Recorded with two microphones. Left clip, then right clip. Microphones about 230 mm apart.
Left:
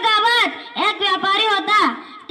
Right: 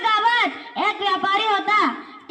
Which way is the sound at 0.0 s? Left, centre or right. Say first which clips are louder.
Left 3 dB; left.